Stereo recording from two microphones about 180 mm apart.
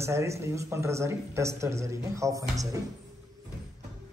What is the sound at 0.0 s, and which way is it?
Speech, 15° right (ahead or behind).